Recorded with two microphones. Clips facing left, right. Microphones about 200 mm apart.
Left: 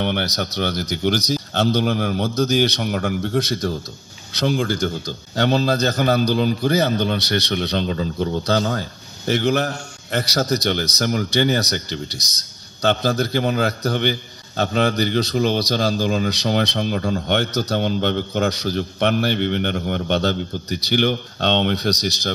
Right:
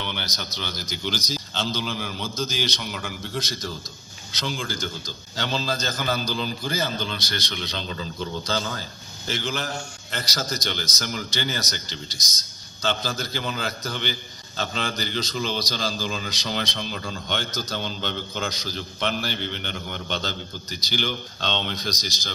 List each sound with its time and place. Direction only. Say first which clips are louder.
0.0 s a man's voice: left 11 dB; 60° left (ahead or behind)